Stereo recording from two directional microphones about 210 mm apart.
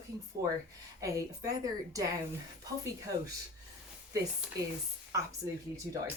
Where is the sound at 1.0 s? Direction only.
15° right (ahead or behind).